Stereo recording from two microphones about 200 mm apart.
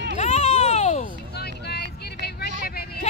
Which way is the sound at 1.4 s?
55° left (ahead or behind).